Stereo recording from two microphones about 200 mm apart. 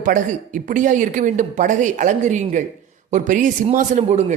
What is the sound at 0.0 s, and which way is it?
A man's voice, 40° right (ahead or behind).